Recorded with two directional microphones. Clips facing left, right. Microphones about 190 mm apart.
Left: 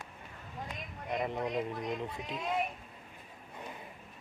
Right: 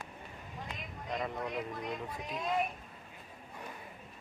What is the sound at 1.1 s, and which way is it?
Speech, 20° left (ahead or behind).